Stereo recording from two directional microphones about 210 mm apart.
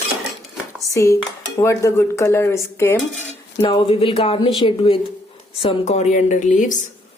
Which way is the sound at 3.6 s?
25° left (ahead or behind).